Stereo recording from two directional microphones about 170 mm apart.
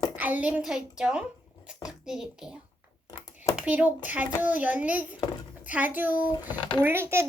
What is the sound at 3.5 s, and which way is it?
A child's voice, 10° right (ahead or behind).